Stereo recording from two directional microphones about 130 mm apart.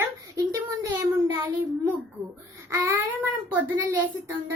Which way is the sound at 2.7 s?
20° right (ahead or behind).